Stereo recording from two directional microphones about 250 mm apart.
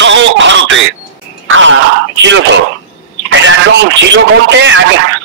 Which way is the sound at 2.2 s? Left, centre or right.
Right.